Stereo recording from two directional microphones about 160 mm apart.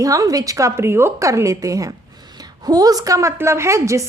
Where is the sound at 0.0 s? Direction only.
20° right (ahead or behind).